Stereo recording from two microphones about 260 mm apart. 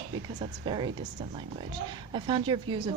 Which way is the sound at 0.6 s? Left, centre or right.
Centre.